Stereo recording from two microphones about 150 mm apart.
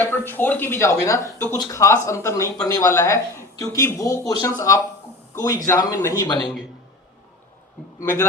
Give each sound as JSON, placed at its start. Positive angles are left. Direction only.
{"t": 0.0, "sound": "speech", "side_deg": 15}